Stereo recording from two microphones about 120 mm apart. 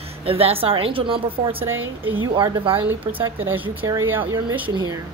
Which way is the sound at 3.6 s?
45° right (ahead or behind).